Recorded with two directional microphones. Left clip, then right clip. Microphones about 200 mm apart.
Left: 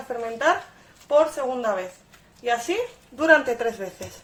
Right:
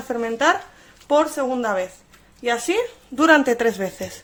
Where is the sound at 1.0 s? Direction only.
55° right (ahead or behind).